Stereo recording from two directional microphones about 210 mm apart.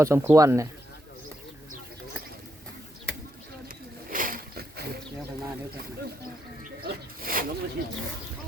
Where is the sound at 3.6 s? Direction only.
40° right (ahead or behind).